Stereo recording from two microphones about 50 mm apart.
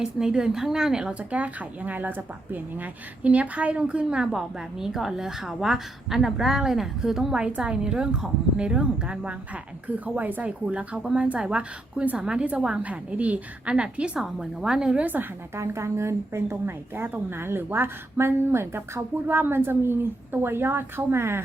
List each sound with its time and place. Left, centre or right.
0.0 s speech: centre
1.3 s speech: right; by 7.3 s centre
7.3 s speech: centre
9.8 s speech: right
10.4 s a woman's voice: right
15.0 s speech: right
15.5 s speech: right